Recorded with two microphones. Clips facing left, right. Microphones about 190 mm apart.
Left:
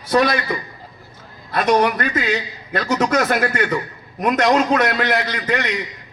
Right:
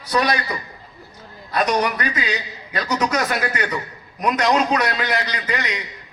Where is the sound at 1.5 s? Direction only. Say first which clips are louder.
Left 4 dB; 50° left (ahead or behind).